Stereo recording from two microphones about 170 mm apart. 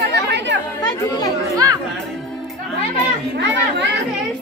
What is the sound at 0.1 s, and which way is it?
Chatter, 90° right.